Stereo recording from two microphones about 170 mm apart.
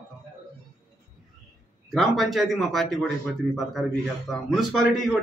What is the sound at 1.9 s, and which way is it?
Speech, centre (ahead or behind).